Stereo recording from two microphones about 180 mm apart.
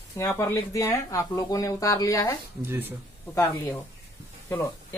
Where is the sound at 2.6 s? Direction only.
10° right (ahead or behind).